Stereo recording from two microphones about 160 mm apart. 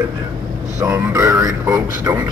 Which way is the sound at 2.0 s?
10° right (ahead or behind).